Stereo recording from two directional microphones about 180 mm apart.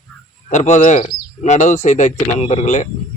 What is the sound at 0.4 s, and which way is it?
Speech, 40° left (ahead or behind).